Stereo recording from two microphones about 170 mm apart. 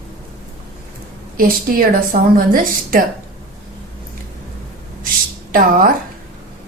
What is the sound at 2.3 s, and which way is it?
Speech, 60° right (ahead or behind).